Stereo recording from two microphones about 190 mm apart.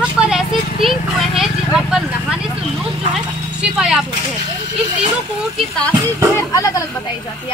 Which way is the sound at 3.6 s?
5° right (ahead or behind).